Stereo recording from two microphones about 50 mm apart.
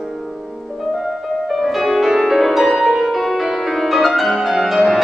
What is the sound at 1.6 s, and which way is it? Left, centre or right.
Music, centre.